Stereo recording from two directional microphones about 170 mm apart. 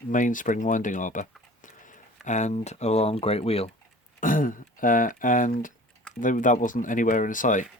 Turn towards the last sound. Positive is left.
turn(degrees=50)  # may be behind; listen again after turning